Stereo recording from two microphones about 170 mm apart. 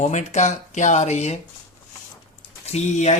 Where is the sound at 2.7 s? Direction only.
40° left (ahead or behind).